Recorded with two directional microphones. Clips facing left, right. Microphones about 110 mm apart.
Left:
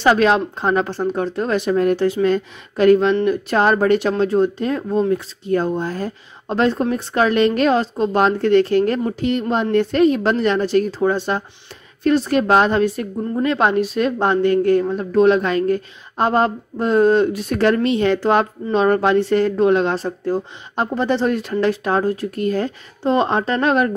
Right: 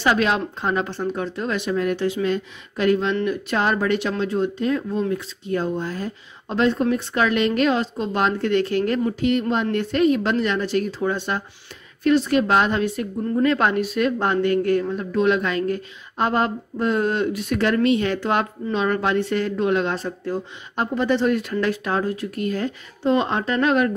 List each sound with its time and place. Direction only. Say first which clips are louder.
0.0 s speech: left 5 dB; 35° left (ahead or behind)
13.4 s speech: left 2 dB; 25° left (ahead or behind)